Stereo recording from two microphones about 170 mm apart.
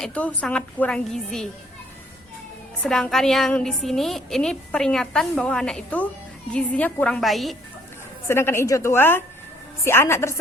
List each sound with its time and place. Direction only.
0.0 s a woman's voice: 10° left (ahead or behind)
2.8 s a woman's voice: 5° left (ahead or behind)
8.3 s a woman's voice: 15° left (ahead or behind)